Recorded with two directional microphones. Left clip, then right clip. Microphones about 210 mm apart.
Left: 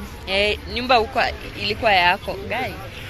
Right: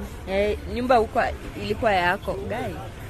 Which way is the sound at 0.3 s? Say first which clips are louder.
Left 4 dB; 25° right (ahead or behind).